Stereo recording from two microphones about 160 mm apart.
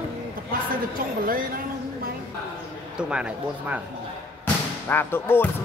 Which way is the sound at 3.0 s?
5° right (ahead or behind).